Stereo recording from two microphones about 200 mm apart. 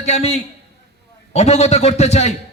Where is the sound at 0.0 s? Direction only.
30° left (ahead or behind).